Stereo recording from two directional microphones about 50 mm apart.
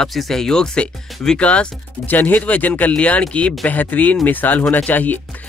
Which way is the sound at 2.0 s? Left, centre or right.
Left.